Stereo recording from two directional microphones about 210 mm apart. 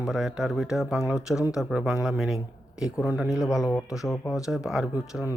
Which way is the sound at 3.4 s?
15° left (ahead or behind).